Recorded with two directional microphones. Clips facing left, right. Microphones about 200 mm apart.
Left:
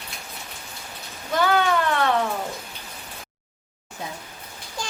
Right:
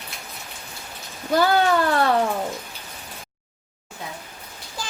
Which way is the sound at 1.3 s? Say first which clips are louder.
Right 3 dB; 35° right (ahead or behind).